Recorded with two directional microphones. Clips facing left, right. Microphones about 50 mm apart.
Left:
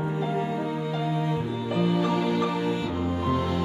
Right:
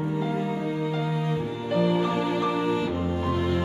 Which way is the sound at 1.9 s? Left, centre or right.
Right.